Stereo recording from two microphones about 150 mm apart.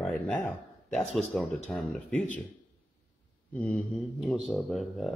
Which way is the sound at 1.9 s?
10° left (ahead or behind).